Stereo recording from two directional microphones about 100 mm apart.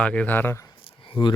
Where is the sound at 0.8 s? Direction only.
55° left (ahead or behind).